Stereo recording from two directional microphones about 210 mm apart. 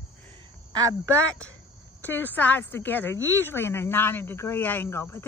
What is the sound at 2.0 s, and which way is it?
Speech, 10° left (ahead or behind).